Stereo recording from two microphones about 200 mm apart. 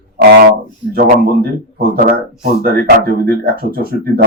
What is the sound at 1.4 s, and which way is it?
A man's voice, 45° right (ahead or behind).